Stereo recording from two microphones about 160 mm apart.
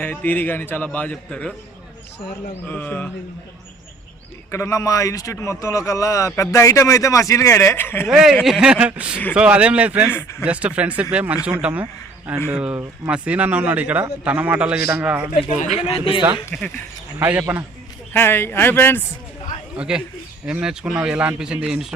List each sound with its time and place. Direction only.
0.0 s speech: 10° left (ahead or behind)
2.6 s speech: 10° left (ahead or behind)
4.5 s a man's voice: 20° left (ahead or behind)
8.0 s a man's voice: 5° right (ahead or behind)
15.9 s a man's voice: 35° left (ahead or behind)
16.5 s speech: 5° left (ahead or behind)
17.2 s a man's voice: 10° right (ahead or behind)
18.1 s speech: 10° left (ahead or behind)
19.7 s speech: 5° right (ahead or behind)